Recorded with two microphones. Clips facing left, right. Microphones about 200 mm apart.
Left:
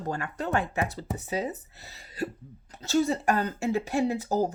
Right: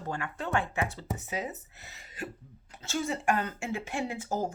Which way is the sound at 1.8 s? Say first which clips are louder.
Left 7 dB; 35° left (ahead or behind).